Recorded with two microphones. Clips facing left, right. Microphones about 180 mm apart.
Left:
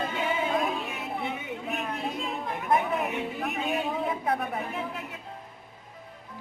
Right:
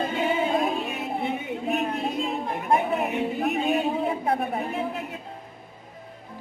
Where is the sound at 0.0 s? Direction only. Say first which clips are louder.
Right 4 dB; 30° right (ahead or behind).